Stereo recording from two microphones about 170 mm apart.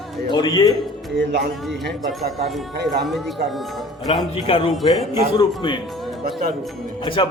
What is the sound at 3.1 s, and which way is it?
Speech, centre (ahead or behind).